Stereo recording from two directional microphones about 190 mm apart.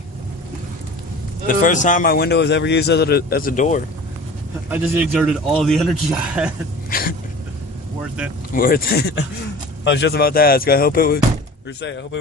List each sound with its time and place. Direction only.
1.6 s a man's voice: 40° left (ahead or behind)
4.6 s speech: 10° right (ahead or behind)
6.9 s a sound: 50° left (ahead or behind)
8.5 s speech: 50° left (ahead or behind)
11.8 s speech: 70° left (ahead or behind)